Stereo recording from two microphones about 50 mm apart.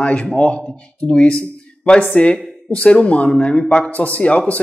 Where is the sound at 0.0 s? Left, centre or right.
Left.